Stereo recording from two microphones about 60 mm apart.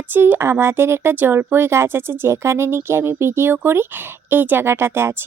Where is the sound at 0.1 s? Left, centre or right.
Right.